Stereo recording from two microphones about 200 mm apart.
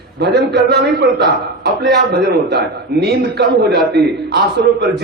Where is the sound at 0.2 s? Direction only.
55° right (ahead or behind).